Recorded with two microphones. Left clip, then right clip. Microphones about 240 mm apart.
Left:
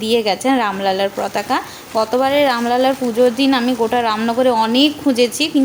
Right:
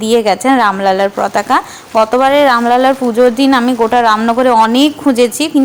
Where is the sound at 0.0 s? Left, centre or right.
Centre.